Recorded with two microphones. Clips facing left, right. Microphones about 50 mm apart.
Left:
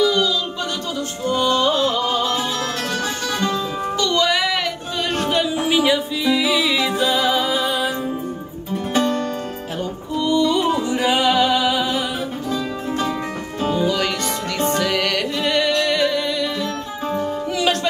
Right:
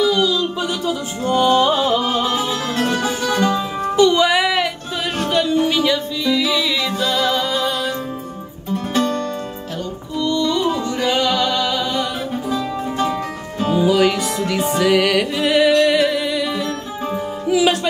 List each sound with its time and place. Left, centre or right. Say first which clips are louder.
0.0 s music: right 2 dB; centre
5.2 s music: right 5 dB; centre
8.9 s music: left 1 dB; centre
12.4 s music: right 2 dB; centre